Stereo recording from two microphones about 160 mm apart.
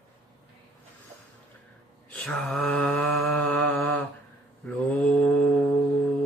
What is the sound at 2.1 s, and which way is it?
Mantra, 5° left (ahead or behind).